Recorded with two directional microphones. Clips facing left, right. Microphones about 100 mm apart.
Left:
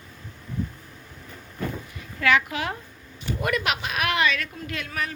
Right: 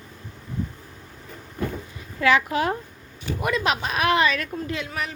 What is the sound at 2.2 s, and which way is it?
Speech, 30° right (ahead or behind).